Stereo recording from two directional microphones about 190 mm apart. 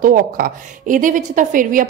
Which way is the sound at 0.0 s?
45° right (ahead or behind).